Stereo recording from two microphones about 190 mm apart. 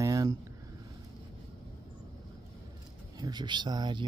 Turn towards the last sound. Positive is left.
turn(degrees=-20)  # may be behind; listen again after turning